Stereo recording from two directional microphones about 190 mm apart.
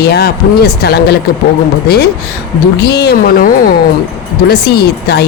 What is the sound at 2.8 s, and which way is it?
Speech, 60° left (ahead or behind).